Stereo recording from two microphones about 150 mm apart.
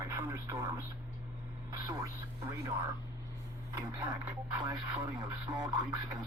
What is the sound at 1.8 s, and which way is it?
Speech, 25° right (ahead or behind).